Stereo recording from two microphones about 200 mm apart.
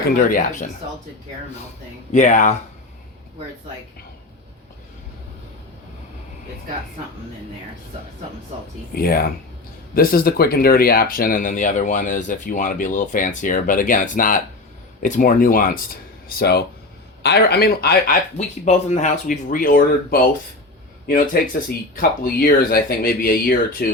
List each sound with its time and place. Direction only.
0.3 s speech: 40° left (ahead or behind)
2.1 s speech: 40° left (ahead or behind)
8.9 s speech: 45° left (ahead or behind)
18.3 s speech: 35° left (ahead or behind)
21.4 s speech: 50° left (ahead or behind)